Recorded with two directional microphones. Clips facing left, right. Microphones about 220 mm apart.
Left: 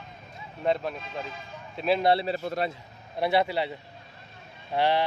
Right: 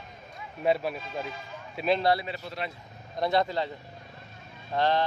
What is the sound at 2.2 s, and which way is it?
Speech, 45° left (ahead or behind).